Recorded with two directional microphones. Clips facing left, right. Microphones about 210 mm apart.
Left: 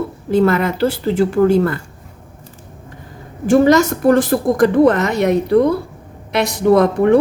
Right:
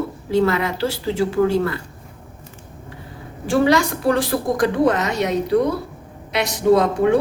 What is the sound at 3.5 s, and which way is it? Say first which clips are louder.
A woman's voice: left 5 dB; 45° left (ahead or behind).